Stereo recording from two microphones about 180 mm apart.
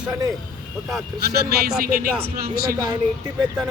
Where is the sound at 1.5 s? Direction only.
55° right (ahead or behind).